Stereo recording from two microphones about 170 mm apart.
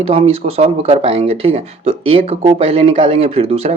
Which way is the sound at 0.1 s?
35° right (ahead or behind).